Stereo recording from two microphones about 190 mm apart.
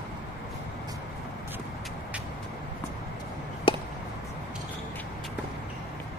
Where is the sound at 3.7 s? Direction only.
25° left (ahead or behind).